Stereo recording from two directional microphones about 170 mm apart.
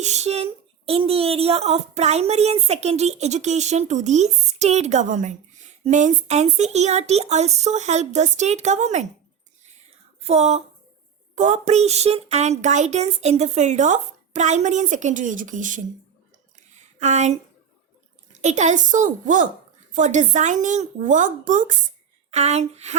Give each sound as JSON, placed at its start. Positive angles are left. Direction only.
{"t": 0.0, "sound": "speech", "side_deg": -40}
{"t": 10.2, "sound": "speech", "side_deg": -40}
{"t": 16.7, "sound": "a sound", "side_deg": -45}
{"t": 18.3, "sound": "speech", "side_deg": -45}